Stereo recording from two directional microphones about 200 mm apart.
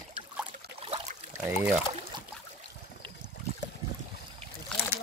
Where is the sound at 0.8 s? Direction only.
30° right (ahead or behind).